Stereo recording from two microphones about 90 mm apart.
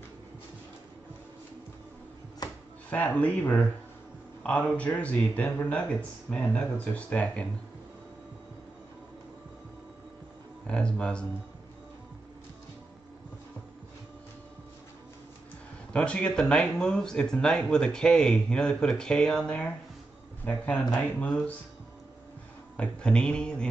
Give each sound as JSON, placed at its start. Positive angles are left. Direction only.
{"t": 2.4, "sound": "a sound", "side_deg": 45}
{"t": 2.9, "sound": "speech", "side_deg": 15}
{"t": 10.7, "sound": "speech", "side_deg": 10}
{"t": 15.9, "sound": "speech", "side_deg": 10}
{"t": 22.8, "sound": "speech", "side_deg": 10}